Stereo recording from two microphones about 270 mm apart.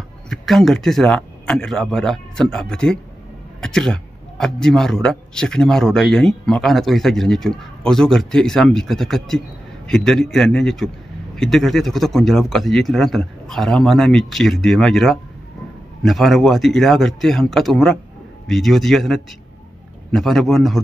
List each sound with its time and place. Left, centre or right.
0.3 s a man's voice: centre